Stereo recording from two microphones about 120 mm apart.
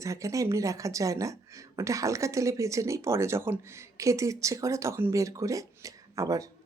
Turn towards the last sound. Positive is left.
turn(degrees=-30)  # may be behind; listen again after turning